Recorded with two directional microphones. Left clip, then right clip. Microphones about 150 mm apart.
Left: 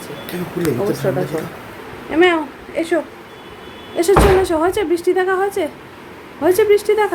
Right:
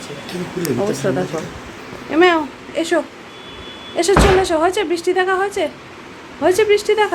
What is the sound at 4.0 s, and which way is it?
Speech, 5° right (ahead or behind).